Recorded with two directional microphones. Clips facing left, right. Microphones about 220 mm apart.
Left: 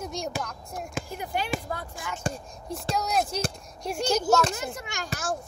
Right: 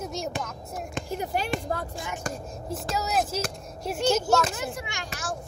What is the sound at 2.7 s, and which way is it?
Speech, 5° right (ahead or behind).